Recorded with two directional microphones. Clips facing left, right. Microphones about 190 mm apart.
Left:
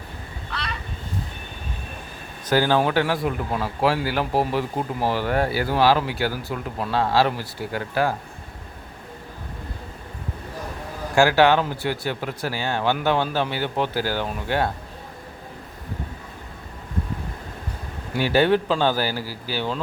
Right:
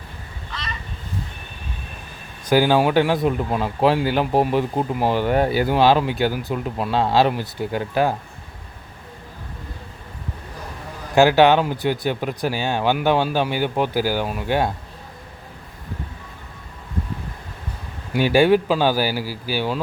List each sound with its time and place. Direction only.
2.5 s speech: 15° right (ahead or behind)
11.1 s speech: 20° right (ahead or behind)
18.1 s speech: 15° right (ahead or behind)